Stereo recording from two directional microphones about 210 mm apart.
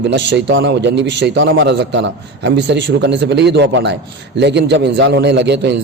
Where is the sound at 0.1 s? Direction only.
55° right (ahead or behind).